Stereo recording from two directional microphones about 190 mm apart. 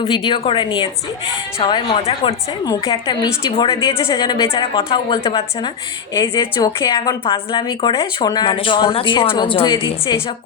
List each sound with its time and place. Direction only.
0.0 s a woman's voice: 30° left (ahead or behind)
4.0 s a woman's voice: 15° left (ahead or behind)